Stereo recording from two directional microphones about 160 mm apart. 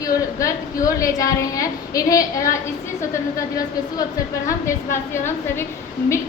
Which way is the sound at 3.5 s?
20° left (ahead or behind).